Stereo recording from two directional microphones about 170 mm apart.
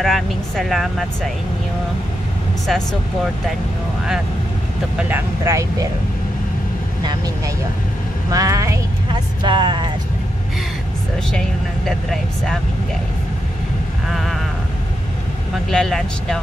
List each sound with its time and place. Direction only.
0.0 s speech: centre (ahead or behind)
2.6 s speech: centre (ahead or behind)
4.9 s speech: 10° right (ahead or behind)
8.3 s speech: 20° right (ahead or behind)
11.3 s speech: 5° left (ahead or behind)
14.0 s speech: centre (ahead or behind)
15.7 s speech: 5° left (ahead or behind)